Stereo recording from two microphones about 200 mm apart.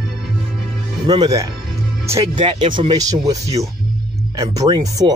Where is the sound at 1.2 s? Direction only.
15° right (ahead or behind).